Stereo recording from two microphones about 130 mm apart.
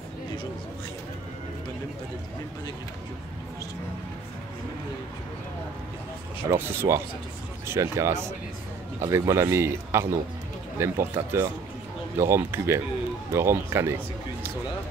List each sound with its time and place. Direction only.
6.5 s speech: 20° right (ahead or behind)